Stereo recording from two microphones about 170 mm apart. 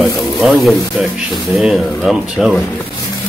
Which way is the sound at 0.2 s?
Centre (ahead or behind).